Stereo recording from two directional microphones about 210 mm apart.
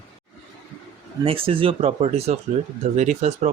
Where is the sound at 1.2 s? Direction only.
25° right (ahead or behind).